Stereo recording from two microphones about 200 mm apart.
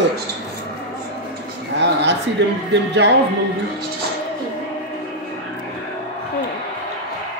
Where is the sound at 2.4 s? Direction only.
60° right (ahead or behind).